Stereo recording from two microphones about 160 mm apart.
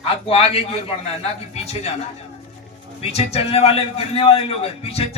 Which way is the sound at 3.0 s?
40° left (ahead or behind).